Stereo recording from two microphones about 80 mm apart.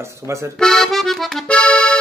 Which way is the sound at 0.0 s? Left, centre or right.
Right.